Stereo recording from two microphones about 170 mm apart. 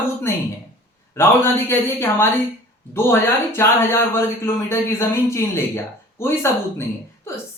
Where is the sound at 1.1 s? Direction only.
15° left (ahead or behind).